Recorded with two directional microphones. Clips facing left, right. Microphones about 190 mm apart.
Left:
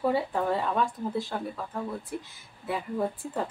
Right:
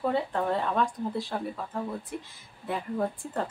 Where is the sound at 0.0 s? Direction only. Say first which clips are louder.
Left 1 dB; 5° left (ahead or behind).